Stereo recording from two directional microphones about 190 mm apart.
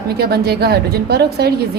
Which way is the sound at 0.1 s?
55° right (ahead or behind).